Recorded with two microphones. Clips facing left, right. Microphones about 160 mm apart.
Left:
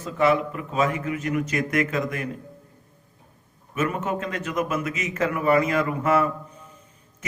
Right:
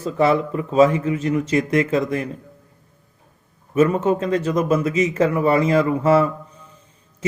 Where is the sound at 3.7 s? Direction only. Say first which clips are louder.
Right 9 dB; 30° right (ahead or behind).